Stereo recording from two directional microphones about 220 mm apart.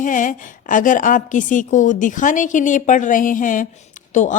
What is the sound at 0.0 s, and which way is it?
Speech, 35° left (ahead or behind).